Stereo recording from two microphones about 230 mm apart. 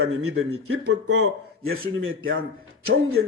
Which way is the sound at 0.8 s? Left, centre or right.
Right.